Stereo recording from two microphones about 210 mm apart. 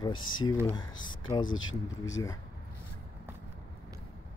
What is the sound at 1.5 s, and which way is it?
Speech, 70° left (ahead or behind).